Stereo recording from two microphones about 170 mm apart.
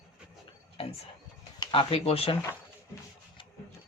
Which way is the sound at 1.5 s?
25° left (ahead or behind).